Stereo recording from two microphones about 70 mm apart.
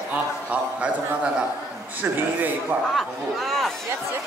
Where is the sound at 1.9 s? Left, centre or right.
Right.